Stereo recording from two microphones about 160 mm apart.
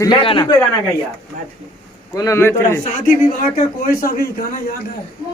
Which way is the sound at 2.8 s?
55° left (ahead or behind).